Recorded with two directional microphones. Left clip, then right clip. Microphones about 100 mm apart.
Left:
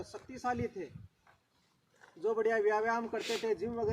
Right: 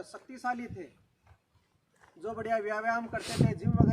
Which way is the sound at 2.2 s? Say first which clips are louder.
Left 2 dB; 25° right (ahead or behind).